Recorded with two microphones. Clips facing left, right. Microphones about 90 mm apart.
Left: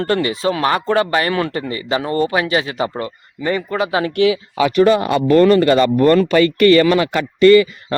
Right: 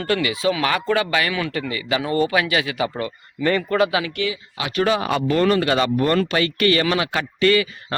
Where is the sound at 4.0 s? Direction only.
50° left (ahead or behind).